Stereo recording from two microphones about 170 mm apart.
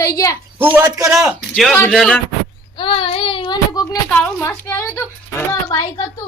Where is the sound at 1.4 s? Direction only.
Centre (ahead or behind).